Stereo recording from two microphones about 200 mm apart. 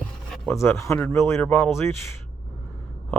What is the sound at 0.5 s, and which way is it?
Speech, 15° left (ahead or behind).